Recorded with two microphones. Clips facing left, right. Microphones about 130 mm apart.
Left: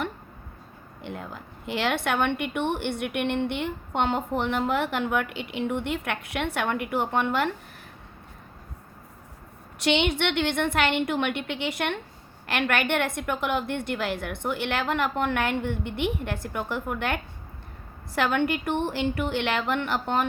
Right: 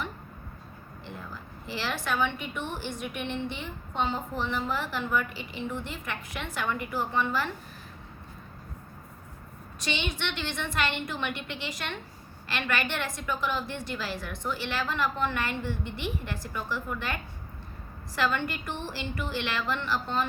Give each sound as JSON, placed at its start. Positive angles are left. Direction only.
{"t": 1.0, "sound": "a woman's voice", "side_deg": 65}
{"t": 9.8, "sound": "a woman's voice", "side_deg": 65}